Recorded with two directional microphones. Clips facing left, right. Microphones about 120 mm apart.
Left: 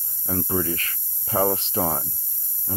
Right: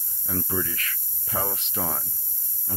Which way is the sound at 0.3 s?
35° left (ahead or behind).